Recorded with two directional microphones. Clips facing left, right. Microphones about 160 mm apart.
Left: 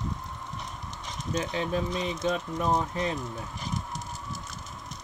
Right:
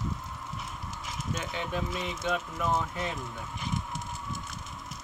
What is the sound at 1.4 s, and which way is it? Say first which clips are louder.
Speech: left 8 dB; 35° left (ahead or behind).